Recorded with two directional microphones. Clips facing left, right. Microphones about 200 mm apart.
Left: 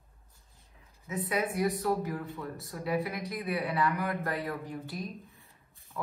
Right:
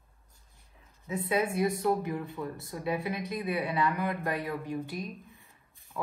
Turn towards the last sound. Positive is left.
turn(degrees=-15)  # may be behind; listen again after turning